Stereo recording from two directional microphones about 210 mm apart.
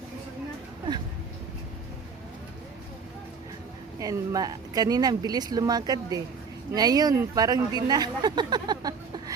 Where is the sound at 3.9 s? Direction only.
15° right (ahead or behind).